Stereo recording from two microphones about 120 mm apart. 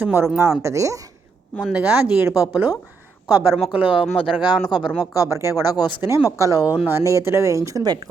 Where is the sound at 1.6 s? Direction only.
5° right (ahead or behind).